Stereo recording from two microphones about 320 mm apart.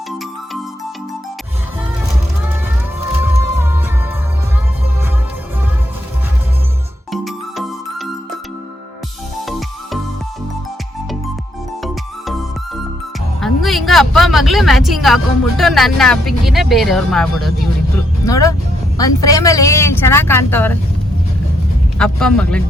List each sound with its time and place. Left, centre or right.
3.0 s music: centre
7.1 s music: centre
9.5 s music: centre
13.4 s speech: centre
21.9 s a man's voice: centre